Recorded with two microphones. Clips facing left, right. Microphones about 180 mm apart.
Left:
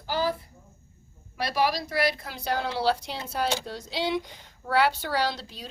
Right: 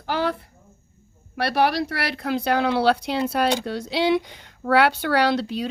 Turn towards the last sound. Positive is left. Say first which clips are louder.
# right 9 dB
turn(degrees=-65)  # may be behind; listen again after turning